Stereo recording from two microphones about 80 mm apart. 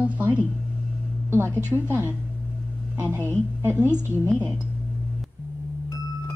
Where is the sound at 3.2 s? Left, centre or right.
Right.